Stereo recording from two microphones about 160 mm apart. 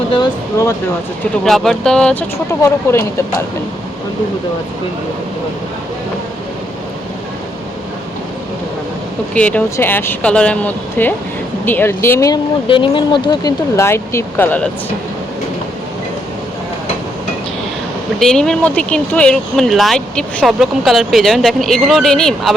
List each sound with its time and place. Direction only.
0.6 s speech: 20° left (ahead or behind)
1.2 s speech: centre (ahead or behind)
2.5 s speech: 20° left (ahead or behind)
9.3 s speech: 10° left (ahead or behind)
12.6 s speech: 30° left (ahead or behind); by 14.7 s 10° left (ahead or behind)
18.2 s speech: 5° left (ahead or behind)